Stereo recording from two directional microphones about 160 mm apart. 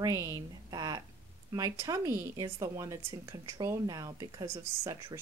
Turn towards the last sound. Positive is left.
turn(degrees=-20)  # may be behind; listen again after turning